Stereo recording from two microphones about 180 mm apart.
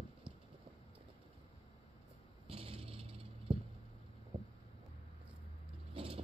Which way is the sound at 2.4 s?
30° right (ahead or behind).